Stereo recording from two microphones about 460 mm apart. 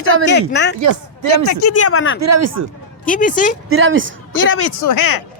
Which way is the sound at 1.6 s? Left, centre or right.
Left.